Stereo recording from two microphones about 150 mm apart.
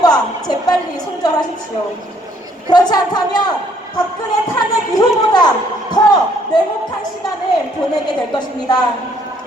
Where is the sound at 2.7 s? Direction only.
25° left (ahead or behind).